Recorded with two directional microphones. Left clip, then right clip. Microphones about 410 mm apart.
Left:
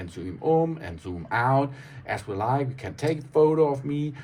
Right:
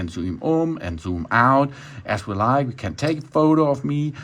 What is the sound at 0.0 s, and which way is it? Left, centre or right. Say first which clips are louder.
Speech: right 3 dB; centre.